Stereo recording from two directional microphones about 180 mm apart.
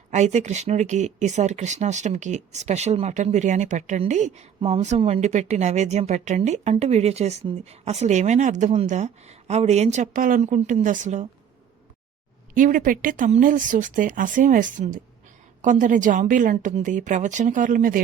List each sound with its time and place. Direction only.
0.1 s speech: 40° right (ahead or behind)
12.5 s speech: 50° right (ahead or behind)